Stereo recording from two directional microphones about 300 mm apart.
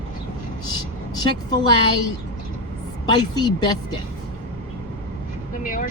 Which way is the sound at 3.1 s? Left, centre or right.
Centre.